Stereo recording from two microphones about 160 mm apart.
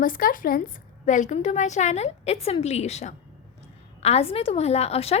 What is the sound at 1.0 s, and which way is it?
A woman's voice, 50° left (ahead or behind).